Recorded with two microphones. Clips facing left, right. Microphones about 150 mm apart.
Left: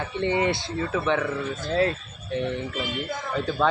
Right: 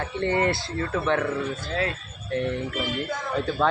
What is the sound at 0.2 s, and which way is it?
Speech, 5° left (ahead or behind).